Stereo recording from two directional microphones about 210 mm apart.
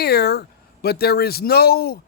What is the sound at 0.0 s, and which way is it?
A man's voice, 50° left (ahead or behind).